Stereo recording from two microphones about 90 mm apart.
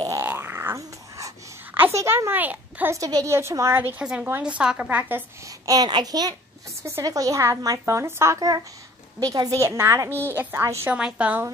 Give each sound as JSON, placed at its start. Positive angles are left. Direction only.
{"t": 0.2, "sound": "a sound", "side_deg": -25}
{"t": 1.7, "sound": "a sound", "side_deg": -25}
{"t": 2.0, "sound": "a child's voice", "side_deg": -30}
{"t": 2.9, "sound": "a woman's voice", "side_deg": -40}
{"t": 4.0, "sound": "speech", "side_deg": -10}
{"t": 5.7, "sound": "a child's voice", "side_deg": -50}
{"t": 7.0, "sound": "a woman's voice", "side_deg": -40}
{"t": 9.2, "sound": "a child's voice", "side_deg": -45}
{"t": 9.6, "sound": "a woman's voice", "side_deg": -30}
{"t": 10.9, "sound": "speech", "side_deg": -10}